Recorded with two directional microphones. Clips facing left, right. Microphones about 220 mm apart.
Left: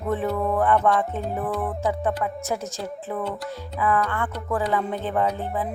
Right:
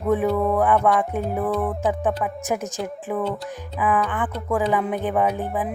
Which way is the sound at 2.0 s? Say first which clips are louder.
Right 2 dB; 15° right (ahead or behind).